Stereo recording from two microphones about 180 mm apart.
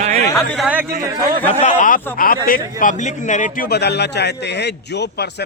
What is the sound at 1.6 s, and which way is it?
A man's voice, 50° left (ahead or behind).